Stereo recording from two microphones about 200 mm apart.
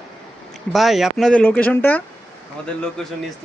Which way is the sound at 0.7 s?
Centre (ahead or behind).